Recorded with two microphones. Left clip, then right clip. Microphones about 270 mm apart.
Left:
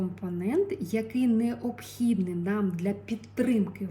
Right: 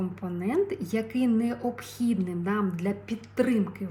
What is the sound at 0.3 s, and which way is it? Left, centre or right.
Speech, centre.